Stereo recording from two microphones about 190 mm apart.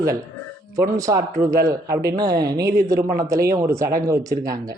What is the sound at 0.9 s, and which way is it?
A woman's voice, 15° right (ahead or behind).